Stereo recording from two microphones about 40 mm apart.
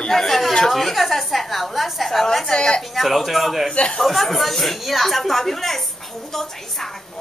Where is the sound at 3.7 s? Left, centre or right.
Left.